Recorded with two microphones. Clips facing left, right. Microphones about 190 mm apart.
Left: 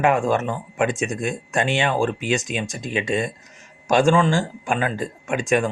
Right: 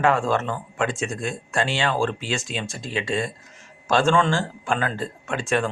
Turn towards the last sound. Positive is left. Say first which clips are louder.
# left 3 dB
turn(degrees=15)  # may be behind; listen again after turning